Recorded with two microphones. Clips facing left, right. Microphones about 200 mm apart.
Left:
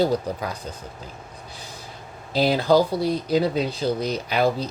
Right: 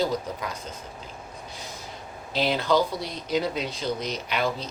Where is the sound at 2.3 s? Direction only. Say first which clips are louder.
Left 5 dB; 40° left (ahead or behind).